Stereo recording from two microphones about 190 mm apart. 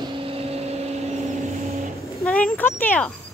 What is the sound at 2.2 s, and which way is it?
Speech, 5° left (ahead or behind).